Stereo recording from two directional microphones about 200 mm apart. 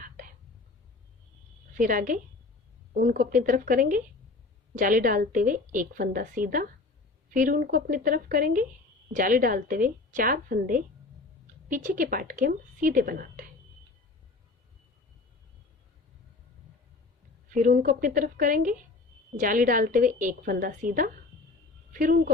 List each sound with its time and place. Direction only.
1.8 s a woman's voice: 40° right (ahead or behind)
17.5 s a woman's voice: 40° right (ahead or behind)